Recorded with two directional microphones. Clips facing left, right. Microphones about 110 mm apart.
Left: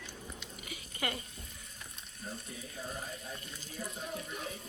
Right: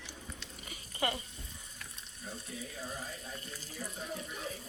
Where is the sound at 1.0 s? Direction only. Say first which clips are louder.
Right 3 dB; 25° right (ahead or behind).